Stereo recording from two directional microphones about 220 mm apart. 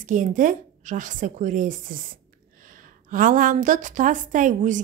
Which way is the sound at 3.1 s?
40° right (ahead or behind).